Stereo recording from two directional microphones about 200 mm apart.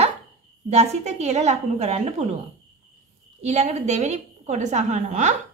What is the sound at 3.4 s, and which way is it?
Speech, 35° right (ahead or behind).